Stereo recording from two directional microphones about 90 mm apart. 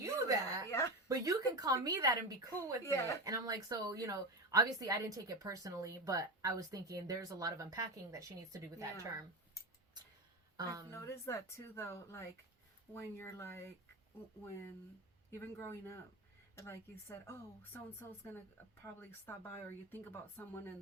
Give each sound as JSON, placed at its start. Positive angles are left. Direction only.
{"t": 0.0, "sound": "a sound", "side_deg": -35}
{"t": 1.0, "sound": "speech", "side_deg": -40}
{"t": 2.8, "sound": "speech", "side_deg": 30}
{"t": 3.2, "sound": "a woman's voice", "side_deg": -45}
{"t": 10.6, "sound": "a woman's voice", "side_deg": -40}
{"t": 10.9, "sound": "speech", "side_deg": 35}
{"t": 15.4, "sound": "speech", "side_deg": 30}
{"t": 18.9, "sound": "speech", "side_deg": 25}